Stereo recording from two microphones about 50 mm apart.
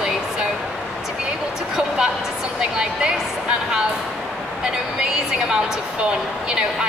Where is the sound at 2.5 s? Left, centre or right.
Centre.